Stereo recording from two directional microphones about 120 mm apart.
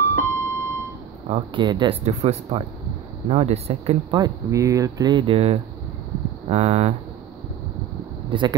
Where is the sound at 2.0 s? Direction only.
60° right (ahead or behind).